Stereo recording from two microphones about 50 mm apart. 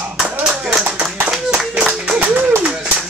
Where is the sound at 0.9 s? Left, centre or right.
Centre.